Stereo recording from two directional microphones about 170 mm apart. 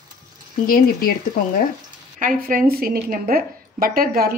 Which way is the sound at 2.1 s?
55° right (ahead or behind).